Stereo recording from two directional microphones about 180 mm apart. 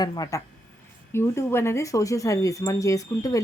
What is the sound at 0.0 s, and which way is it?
A woman's voice, 20° left (ahead or behind).